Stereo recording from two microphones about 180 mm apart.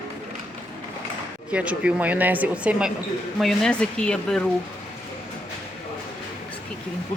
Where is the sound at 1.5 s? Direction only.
5° right (ahead or behind).